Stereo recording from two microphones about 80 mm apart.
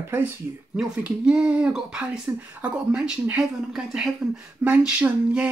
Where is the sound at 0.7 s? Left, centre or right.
Centre.